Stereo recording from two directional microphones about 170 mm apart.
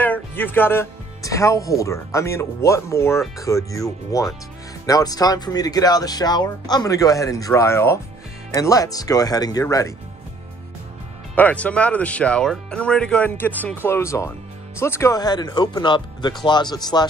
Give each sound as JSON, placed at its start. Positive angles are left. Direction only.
{"t": 0.0, "sound": "speech", "side_deg": 10}
{"t": 11.3, "sound": "speech", "side_deg": 10}